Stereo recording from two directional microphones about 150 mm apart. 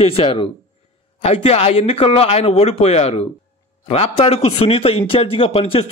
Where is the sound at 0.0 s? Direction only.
40° left (ahead or behind).